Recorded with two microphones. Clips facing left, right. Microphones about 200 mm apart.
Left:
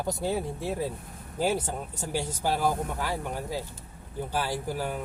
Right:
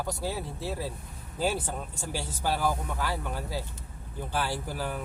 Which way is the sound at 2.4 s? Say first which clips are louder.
Left 1 dB; 15° left (ahead or behind).